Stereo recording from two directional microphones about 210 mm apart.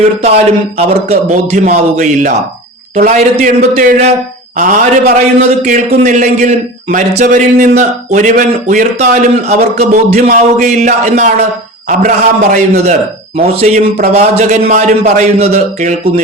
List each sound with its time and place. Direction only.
0.2 s a man's voice: 30° right (ahead or behind)